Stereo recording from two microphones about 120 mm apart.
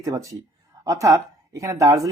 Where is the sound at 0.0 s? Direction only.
25° right (ahead or behind).